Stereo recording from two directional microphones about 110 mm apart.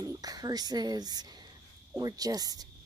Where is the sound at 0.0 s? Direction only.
35° right (ahead or behind).